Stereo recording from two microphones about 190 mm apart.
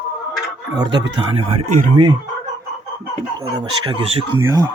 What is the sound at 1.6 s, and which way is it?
Speech, 40° right (ahead or behind).